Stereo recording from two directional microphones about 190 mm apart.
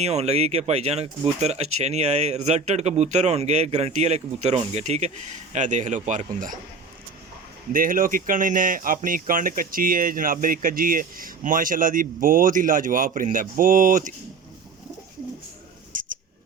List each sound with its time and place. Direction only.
0.0 s speech: 35° right (ahead or behind)
7.7 s speech: 45° right (ahead or behind)
15.9 s a sound: 45° right (ahead or behind)